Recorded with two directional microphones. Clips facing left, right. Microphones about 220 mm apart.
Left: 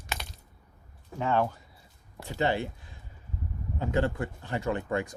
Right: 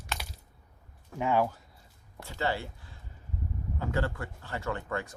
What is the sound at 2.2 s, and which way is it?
Speech, 20° left (ahead or behind).